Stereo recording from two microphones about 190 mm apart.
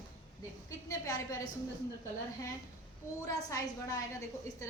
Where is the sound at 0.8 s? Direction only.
15° left (ahead or behind).